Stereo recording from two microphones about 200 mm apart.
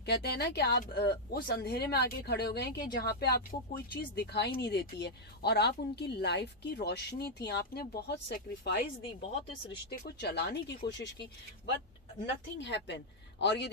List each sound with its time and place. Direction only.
0.0 s speech: 55° left (ahead or behind)
9.2 s speech: 30° left (ahead or behind)
10.0 s speech: 55° left (ahead or behind)